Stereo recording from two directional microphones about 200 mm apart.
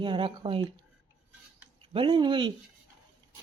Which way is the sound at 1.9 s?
25° right (ahead or behind).